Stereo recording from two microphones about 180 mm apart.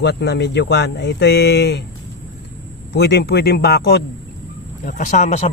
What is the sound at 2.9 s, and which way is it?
Speech, 65° left (ahead or behind).